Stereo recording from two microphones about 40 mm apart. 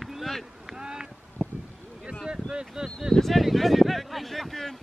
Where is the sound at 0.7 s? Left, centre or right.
Centre.